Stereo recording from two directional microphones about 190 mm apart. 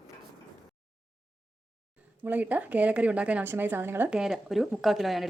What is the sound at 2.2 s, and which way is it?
A woman's voice, 10° right (ahead or behind).